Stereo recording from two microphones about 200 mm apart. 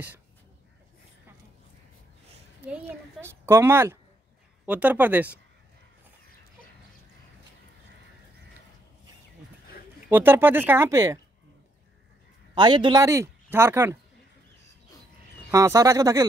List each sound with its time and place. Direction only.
2.6 s speech: 10° right (ahead or behind)
10.0 s speech: 10° right (ahead or behind)
12.5 s speech: 20° right (ahead or behind)
15.5 s speech: 15° right (ahead or behind)